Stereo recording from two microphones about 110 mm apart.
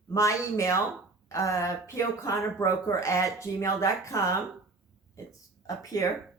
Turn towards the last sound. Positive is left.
turn(degrees=30)  # may be behind; listen again after turning